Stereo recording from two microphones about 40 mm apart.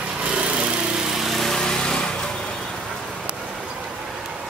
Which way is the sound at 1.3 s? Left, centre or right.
Centre.